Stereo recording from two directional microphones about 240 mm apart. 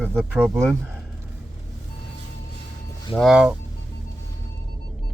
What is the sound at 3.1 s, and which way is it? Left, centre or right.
Speech, centre.